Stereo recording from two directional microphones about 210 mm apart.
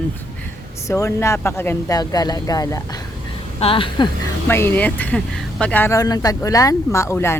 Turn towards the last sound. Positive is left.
turn(degrees=10)  # may be behind; listen again after turning